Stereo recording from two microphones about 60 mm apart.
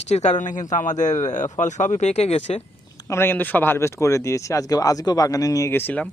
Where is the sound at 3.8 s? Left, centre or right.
Left.